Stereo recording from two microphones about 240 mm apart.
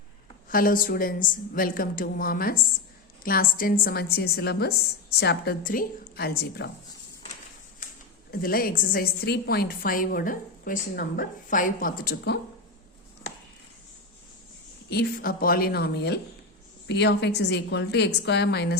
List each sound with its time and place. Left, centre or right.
0.4 s a woman's voice: left
8.3 s a woman's voice: left
14.8 s a woman's voice: left